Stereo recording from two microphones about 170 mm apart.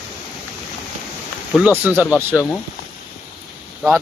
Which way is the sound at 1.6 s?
10° right (ahead or behind).